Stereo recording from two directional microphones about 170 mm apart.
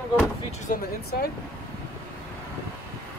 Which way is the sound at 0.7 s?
55° left (ahead or behind).